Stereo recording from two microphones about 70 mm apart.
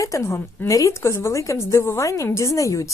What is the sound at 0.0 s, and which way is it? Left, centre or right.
Speech, left.